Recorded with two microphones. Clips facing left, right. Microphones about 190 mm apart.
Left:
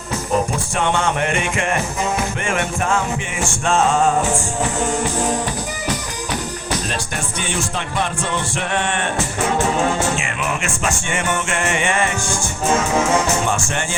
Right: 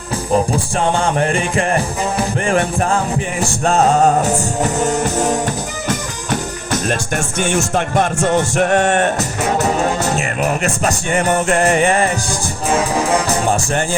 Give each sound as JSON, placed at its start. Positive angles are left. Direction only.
{"t": 0.5, "sound": "music", "side_deg": -35}
{"t": 7.3, "sound": "music", "side_deg": -45}